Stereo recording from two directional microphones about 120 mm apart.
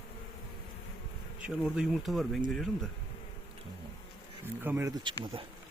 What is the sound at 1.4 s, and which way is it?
Speech, 5° right (ahead or behind).